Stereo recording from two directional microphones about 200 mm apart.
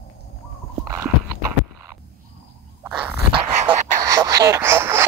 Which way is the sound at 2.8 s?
10° right (ahead or behind).